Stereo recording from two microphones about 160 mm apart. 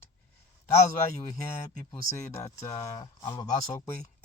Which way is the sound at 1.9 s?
20° left (ahead or behind).